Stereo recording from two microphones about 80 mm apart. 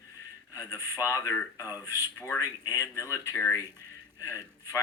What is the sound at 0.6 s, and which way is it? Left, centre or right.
Speech, left.